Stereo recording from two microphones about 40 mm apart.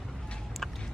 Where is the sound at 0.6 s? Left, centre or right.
Centre.